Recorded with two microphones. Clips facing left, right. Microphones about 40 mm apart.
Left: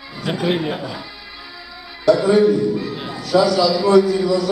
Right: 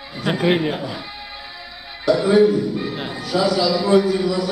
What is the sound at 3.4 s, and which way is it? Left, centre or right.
A man's voice, right.